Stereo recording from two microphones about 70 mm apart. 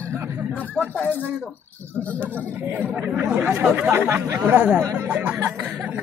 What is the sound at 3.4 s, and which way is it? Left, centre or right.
Speech, right.